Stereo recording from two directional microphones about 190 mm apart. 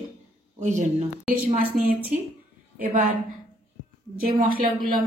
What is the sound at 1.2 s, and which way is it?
Speech, 10° right (ahead or behind).